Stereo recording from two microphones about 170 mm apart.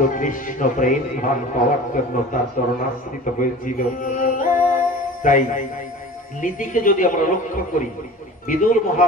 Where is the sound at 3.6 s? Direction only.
50° left (ahead or behind).